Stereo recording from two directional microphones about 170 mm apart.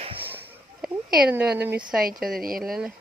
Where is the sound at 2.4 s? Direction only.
55° right (ahead or behind).